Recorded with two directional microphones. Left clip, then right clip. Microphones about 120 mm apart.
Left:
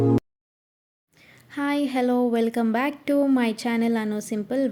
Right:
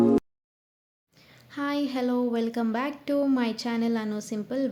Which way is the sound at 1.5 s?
40° left (ahead or behind).